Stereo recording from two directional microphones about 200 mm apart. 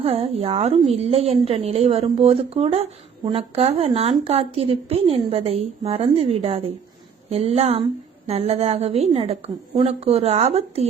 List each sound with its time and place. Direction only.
0.0 s a woman's voice: 30° right (ahead or behind)